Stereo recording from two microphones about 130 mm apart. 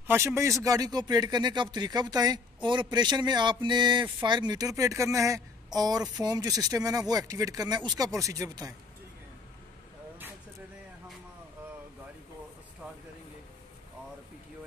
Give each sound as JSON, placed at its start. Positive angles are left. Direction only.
{"t": 0.0, "sound": "a man's voice", "side_deg": -20}